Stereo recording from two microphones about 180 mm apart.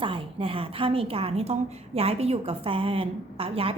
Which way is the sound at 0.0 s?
30° right (ahead or behind).